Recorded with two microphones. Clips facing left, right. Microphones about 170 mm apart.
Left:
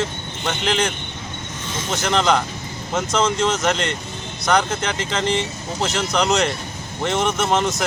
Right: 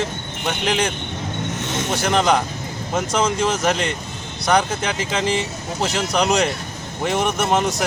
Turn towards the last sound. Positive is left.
turn(degrees=-10)  # may be behind; listen again after turning